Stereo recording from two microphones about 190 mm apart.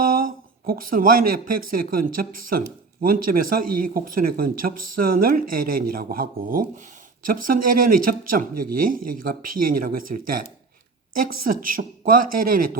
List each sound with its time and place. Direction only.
0.0 s speech: 50° right (ahead or behind)